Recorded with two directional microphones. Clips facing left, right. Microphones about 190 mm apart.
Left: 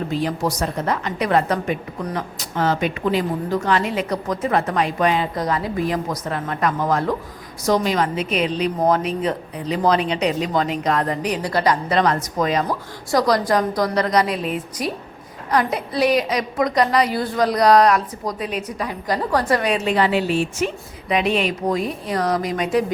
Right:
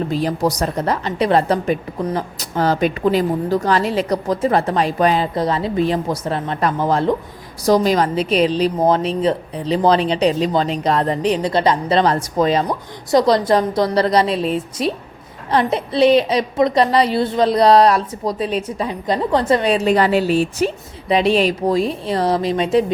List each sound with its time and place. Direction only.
0.1 s a woman's voice: 40° right (ahead or behind)
19.7 s a woman's voice: 40° right (ahead or behind)